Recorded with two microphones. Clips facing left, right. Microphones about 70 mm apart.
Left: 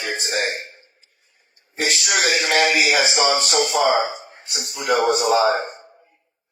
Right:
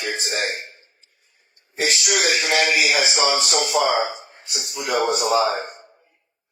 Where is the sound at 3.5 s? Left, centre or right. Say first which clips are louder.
Left 2 dB; left.